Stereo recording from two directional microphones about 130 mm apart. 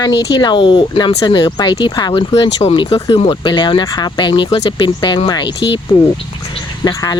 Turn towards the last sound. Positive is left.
turn(degrees=30)  # may be behind; listen again after turning